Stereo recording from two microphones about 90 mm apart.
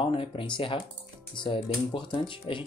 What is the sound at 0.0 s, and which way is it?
Speech, 80° left.